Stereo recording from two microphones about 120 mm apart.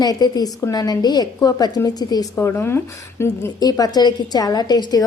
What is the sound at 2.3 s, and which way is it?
Speech, 20° left (ahead or behind).